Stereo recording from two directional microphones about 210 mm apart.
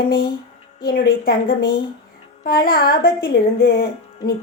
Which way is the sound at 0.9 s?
45° left (ahead or behind).